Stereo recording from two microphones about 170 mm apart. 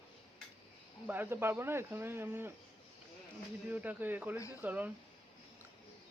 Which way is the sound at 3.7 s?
10° right (ahead or behind).